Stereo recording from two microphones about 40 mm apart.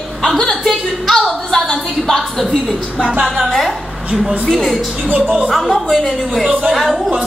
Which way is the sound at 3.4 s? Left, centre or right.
Centre.